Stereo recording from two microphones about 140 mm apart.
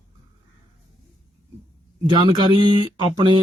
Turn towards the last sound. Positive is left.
turn(degrees=-30)  # may be behind; listen again after turning